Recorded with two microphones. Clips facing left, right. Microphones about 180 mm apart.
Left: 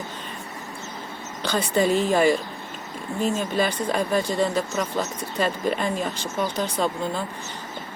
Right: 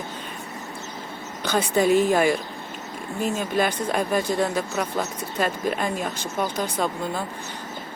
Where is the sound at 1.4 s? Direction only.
10° right (ahead or behind).